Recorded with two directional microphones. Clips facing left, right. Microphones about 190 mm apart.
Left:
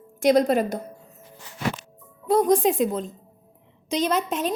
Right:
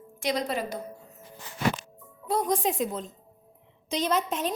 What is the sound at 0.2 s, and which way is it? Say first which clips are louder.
Speech: left 10 dB; 50° left (ahead or behind).